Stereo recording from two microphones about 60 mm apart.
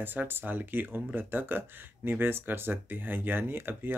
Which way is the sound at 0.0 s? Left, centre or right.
Right.